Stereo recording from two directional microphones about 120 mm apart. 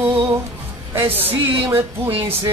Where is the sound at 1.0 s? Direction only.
15° right (ahead or behind).